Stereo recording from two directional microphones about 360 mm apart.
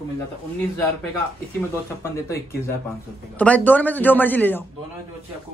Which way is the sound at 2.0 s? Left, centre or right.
Centre.